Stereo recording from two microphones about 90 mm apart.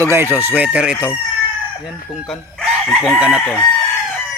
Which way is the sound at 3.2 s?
10° right (ahead or behind).